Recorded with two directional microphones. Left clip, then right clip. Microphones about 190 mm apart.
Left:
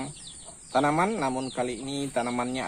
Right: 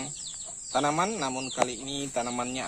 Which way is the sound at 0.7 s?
25° right (ahead or behind).